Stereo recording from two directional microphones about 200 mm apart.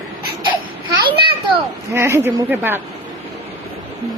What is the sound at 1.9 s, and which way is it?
Speech, 10° right (ahead or behind).